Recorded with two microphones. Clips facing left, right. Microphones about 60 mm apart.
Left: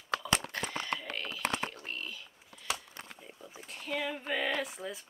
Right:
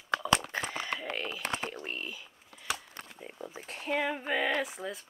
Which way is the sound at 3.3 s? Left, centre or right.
Right.